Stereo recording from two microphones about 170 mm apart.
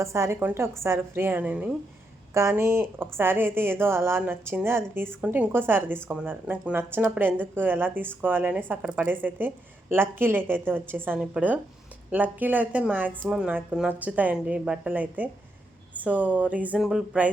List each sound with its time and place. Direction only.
0.0 s a woman's voice: 15° right (ahead or behind)